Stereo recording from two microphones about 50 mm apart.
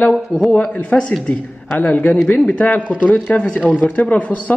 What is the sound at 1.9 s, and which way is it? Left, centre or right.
Speech, left.